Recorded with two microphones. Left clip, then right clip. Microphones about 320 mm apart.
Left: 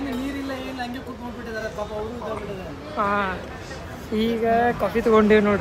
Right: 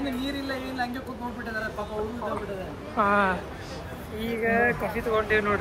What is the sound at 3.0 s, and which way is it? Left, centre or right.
Speech, centre.